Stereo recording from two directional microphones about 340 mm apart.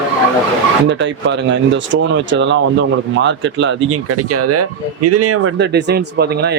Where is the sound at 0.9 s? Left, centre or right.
Right.